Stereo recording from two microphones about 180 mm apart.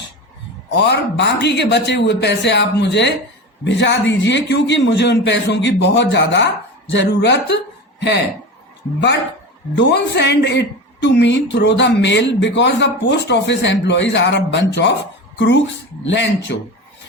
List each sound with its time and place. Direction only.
0.7 s a woman's voice: 70° left (ahead or behind)
9.7 s a woman's voice: 70° left (ahead or behind)